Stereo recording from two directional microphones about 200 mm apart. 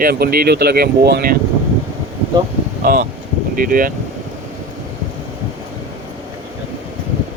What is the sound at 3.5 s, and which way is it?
Speech, 45° right (ahead or behind).